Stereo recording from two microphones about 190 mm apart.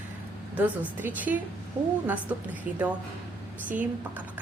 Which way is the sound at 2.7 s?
45° right (ahead or behind).